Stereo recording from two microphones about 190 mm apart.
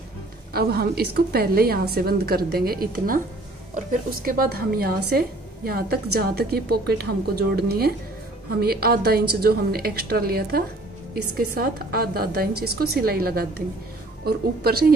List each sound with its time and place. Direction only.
0.5 s a woman's voice: 55° right (ahead or behind)